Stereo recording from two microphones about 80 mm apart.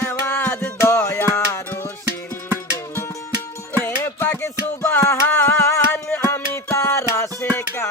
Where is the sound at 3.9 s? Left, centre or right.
Left.